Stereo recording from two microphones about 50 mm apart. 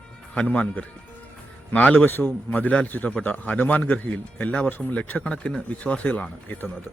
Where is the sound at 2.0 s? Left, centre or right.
Left.